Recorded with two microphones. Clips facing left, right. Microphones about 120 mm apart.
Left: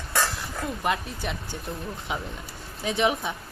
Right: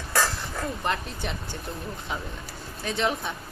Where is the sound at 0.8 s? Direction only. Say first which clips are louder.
Left 4 dB; 5° left (ahead or behind).